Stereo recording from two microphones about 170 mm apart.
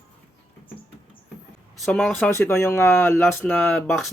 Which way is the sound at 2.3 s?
15° left (ahead or behind).